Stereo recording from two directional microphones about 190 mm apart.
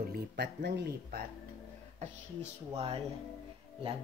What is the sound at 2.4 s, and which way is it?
Speech, 30° right (ahead or behind).